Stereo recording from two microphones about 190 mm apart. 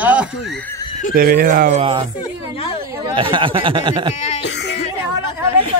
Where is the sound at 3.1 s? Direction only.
25° right (ahead or behind).